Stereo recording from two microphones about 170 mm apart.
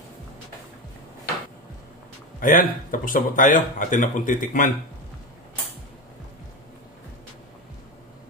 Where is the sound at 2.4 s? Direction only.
50° left (ahead or behind).